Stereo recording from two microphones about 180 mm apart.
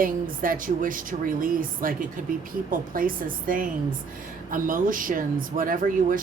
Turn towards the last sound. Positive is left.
turn(degrees=-50)  # may be behind; listen again after turning